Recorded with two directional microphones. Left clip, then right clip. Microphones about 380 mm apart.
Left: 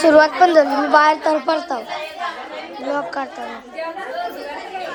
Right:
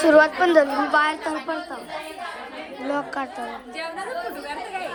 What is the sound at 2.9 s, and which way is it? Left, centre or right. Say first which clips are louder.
Speech: left 4 dB; centre.